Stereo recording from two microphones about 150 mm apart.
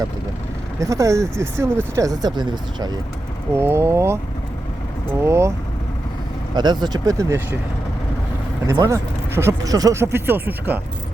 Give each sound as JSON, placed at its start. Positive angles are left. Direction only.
{"t": 0.8, "sound": "speech", "side_deg": -20}
{"t": 3.5, "sound": "speech", "side_deg": -15}
{"t": 5.2, "sound": "speech", "side_deg": -20}
{"t": 6.6, "sound": "speech", "side_deg": -30}
{"t": 8.6, "sound": "speech", "side_deg": -20}